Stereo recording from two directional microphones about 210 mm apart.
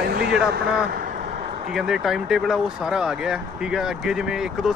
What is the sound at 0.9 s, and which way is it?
Vehicle, 45° right (ahead or behind).